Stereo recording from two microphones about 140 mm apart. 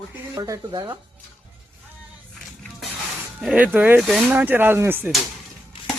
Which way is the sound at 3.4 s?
10° right (ahead or behind).